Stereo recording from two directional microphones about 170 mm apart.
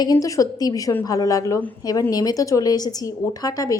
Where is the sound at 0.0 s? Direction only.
20° left (ahead or behind).